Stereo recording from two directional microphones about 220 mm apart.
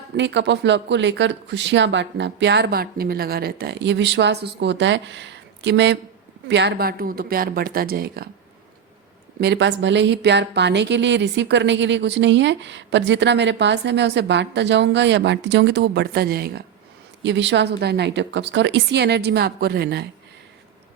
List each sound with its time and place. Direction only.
0.2 s speech: 55° right (ahead or behind)
9.4 s speech: 50° right (ahead or behind)